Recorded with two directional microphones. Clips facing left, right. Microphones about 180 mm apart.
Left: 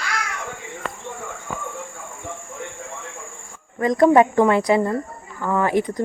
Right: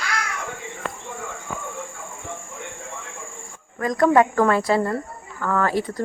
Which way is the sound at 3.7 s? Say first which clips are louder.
Left 3 dB; 25° left (ahead or behind).